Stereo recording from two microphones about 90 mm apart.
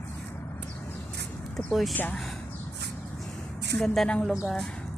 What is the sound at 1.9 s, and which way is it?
Speech, 20° left (ahead or behind).